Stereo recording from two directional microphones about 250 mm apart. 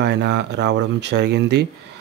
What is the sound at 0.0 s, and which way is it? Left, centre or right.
Speech, right.